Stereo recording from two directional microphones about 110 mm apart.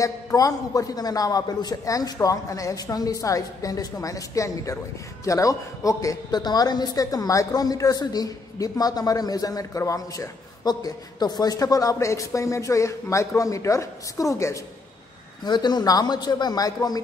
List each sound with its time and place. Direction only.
0.0 s a woman's voice: 30° left (ahead or behind)
15.4 s speech: 40° left (ahead or behind)